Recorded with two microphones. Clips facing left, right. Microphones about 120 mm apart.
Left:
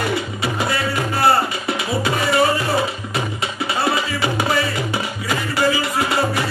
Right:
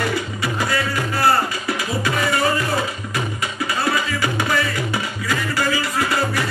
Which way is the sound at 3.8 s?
25° left (ahead or behind).